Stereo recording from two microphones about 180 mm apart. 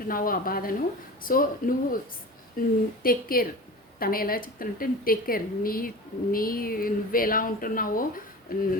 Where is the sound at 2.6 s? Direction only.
55° left (ahead or behind).